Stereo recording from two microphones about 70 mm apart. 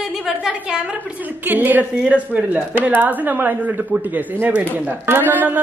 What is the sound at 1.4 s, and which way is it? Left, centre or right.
Speech, right.